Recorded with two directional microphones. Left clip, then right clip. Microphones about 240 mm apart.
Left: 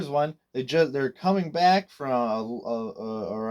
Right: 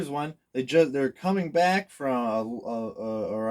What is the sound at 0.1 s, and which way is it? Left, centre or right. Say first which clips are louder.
Speech: left 6 dB; left.